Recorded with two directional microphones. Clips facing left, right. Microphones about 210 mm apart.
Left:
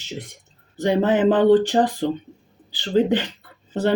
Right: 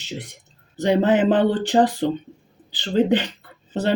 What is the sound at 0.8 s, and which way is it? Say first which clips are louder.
Speech: right 1 dB; 15° right (ahead or behind).